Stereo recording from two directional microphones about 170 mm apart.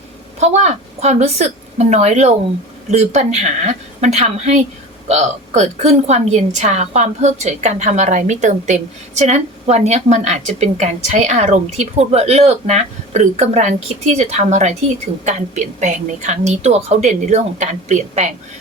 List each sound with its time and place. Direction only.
0.3 s a woman's voice: 40° right (ahead or behind)